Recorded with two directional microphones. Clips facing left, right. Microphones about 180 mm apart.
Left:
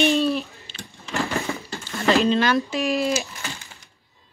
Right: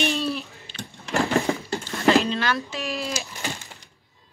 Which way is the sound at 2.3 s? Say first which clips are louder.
Left 6 dB; 20° left (ahead or behind).